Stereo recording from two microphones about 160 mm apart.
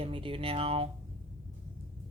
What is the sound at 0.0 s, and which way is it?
Speech, 35° right (ahead or behind).